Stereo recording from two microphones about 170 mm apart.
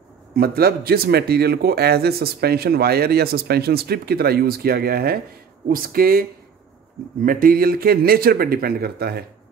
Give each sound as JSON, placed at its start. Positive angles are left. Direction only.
{"t": 0.4, "sound": "speech", "side_deg": -65}